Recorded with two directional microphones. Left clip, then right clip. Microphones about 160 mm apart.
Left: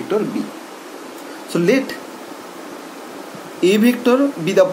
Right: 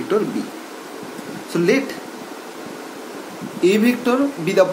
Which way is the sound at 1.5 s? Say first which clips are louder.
Left 1 dB; 35° left (ahead or behind).